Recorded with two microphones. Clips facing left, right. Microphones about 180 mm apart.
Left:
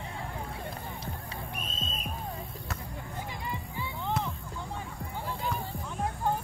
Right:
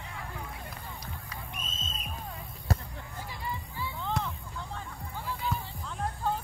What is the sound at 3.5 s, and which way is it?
Music, 20° left (ahead or behind).